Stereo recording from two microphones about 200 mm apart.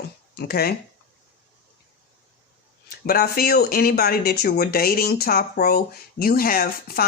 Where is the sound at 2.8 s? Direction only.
50° left (ahead or behind).